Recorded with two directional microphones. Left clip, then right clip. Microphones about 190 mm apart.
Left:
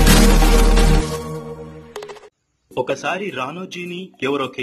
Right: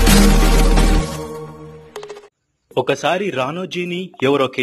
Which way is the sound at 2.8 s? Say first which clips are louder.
Right 6 dB; 40° right (ahead or behind).